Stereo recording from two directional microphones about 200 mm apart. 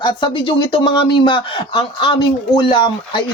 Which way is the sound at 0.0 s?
25° left (ahead or behind).